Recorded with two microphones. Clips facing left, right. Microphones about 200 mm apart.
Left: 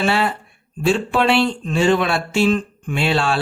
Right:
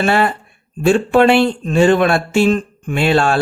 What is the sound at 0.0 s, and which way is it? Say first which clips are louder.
Speech: right 4 dB; 50° right (ahead or behind).